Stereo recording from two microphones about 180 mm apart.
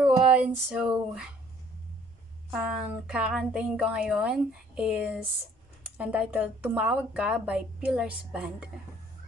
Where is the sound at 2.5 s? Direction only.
5° right (ahead or behind).